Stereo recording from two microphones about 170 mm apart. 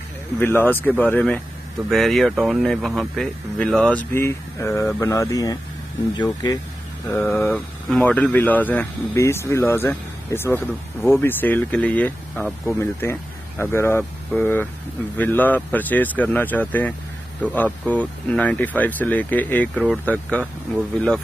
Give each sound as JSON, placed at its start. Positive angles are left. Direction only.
{"t": 0.4, "sound": "speech", "side_deg": 10}
{"t": 3.9, "sound": "speech", "side_deg": 15}
{"t": 7.1, "sound": "speech", "side_deg": 10}